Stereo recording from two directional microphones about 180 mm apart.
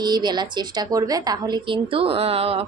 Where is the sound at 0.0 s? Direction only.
25° right (ahead or behind).